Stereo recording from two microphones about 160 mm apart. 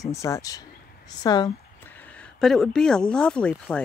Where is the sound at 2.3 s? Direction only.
Centre (ahead or behind).